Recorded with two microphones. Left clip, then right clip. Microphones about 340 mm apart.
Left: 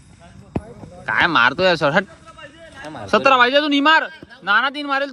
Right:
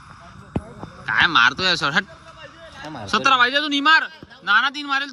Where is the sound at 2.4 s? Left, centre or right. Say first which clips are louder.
Left 2 dB; right.